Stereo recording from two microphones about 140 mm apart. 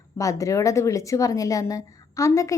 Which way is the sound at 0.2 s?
25° left (ahead or behind).